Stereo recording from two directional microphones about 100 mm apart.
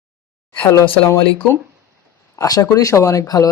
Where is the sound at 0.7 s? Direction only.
30° left (ahead or behind).